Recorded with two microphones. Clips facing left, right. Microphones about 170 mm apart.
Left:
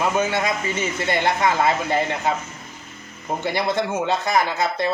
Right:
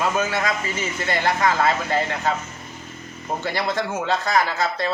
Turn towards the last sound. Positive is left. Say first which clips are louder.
# left 1 dB
turn(degrees=20)  # may be behind; listen again after turning